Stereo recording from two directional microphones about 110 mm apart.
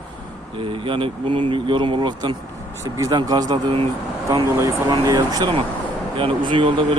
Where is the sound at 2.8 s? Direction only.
30° right (ahead or behind).